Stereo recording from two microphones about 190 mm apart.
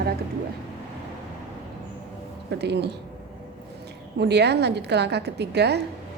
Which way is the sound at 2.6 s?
60° right (ahead or behind).